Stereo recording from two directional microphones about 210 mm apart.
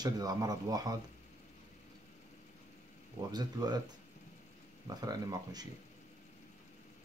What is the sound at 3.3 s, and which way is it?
Speech, 20° right (ahead or behind).